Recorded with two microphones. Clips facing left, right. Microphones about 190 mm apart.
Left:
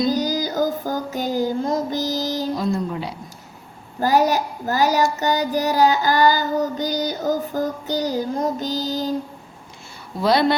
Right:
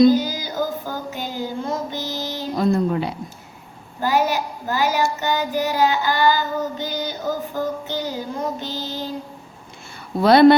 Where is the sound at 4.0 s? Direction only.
40° left (ahead or behind).